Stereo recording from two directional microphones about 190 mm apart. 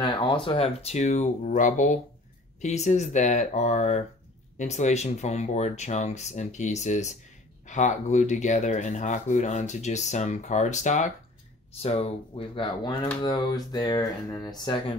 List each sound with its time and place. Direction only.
0.0 s speech: 25° left (ahead or behind)